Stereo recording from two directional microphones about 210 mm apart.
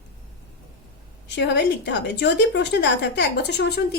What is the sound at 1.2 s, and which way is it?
A woman's voice, 55° left (ahead or behind).